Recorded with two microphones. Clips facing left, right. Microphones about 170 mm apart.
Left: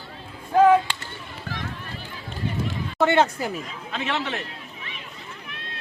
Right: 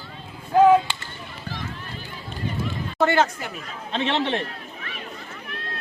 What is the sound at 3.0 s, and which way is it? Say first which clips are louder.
Speech: left 1 dB; 25° left (ahead or behind).